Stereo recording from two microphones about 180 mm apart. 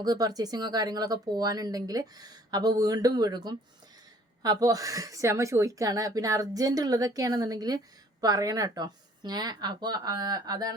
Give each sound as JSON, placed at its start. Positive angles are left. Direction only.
{"t": 0.0, "sound": "speech", "side_deg": -20}